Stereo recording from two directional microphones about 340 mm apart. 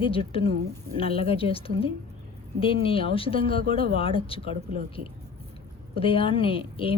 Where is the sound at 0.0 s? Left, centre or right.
Centre.